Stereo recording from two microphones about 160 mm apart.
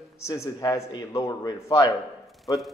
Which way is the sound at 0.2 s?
20° left (ahead or behind).